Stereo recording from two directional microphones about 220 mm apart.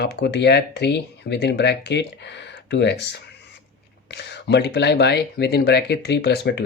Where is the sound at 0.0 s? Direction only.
50° left (ahead or behind).